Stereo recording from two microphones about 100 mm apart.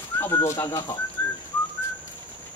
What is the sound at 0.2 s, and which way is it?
Speech, 25° left (ahead or behind).